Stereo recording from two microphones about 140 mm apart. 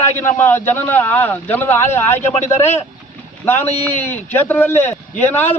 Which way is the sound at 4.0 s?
15° left (ahead or behind).